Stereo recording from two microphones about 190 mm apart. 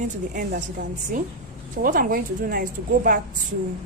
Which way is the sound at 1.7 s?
45° right (ahead or behind).